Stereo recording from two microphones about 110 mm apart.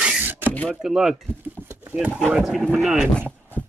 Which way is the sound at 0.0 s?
15° right (ahead or behind).